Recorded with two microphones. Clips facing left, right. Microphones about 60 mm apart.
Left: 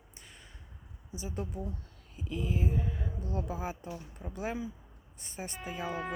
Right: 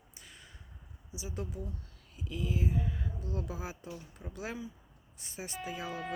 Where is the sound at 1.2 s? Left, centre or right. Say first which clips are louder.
Left 2 dB; centre.